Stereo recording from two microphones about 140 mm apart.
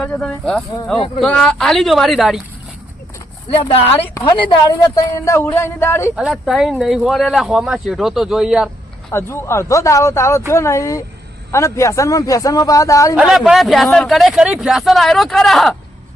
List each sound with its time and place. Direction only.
0.0 s speech: 10° left (ahead or behind)
0.9 s speech: 40° left (ahead or behind)
1.2 s speech: 5° left (ahead or behind)
3.9 s speech: 15° left (ahead or behind)
4.4 s speech: 30° left (ahead or behind)
6.1 s speech: centre (ahead or behind)
9.1 s speech: 20° left (ahead or behind)
13.1 s speech: 5° right (ahead or behind)